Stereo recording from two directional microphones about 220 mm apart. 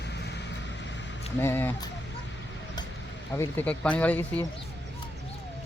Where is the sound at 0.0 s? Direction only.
50° left (ahead or behind).